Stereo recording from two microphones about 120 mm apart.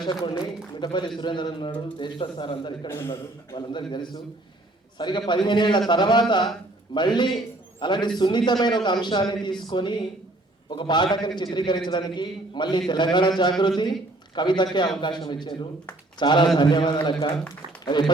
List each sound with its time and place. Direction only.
0.0 s a man's voice: 40° left (ahead or behind)